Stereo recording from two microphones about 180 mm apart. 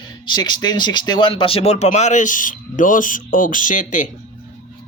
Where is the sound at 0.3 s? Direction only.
25° left (ahead or behind); by 4.1 s 45° left (ahead or behind).